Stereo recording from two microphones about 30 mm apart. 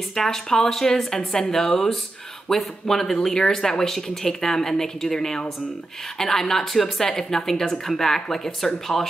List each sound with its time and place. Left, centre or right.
0.1 s speech: centre